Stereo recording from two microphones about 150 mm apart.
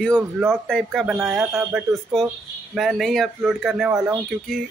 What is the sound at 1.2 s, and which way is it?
Speech, 15° right (ahead or behind).